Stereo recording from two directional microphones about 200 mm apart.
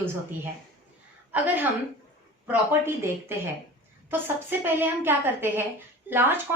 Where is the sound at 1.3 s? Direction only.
10° right (ahead or behind).